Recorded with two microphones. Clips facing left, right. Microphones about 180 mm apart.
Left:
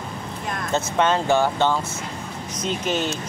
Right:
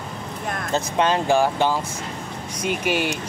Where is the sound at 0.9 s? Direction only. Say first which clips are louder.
Even; 15° right (ahead or behind).